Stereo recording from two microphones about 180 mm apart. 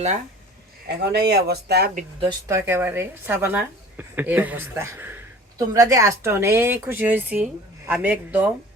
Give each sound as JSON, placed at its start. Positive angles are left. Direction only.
{"t": 0.9, "sound": "speech", "side_deg": -65}
{"t": 2.5, "sound": "a woman's voice", "side_deg": -15}